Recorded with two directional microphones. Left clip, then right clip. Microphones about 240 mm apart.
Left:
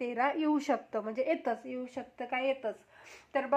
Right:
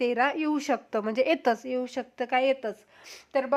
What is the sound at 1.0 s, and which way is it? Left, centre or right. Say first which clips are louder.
A woman's voice: right 7 dB; right.